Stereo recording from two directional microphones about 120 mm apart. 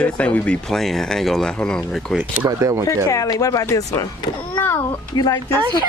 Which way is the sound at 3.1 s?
30° left (ahead or behind).